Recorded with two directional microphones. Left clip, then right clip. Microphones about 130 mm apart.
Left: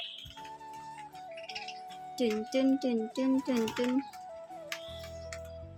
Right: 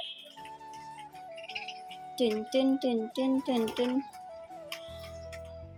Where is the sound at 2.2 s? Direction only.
25° left (ahead or behind).